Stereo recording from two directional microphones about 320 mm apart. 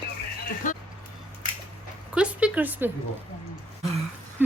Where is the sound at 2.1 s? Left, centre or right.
Centre.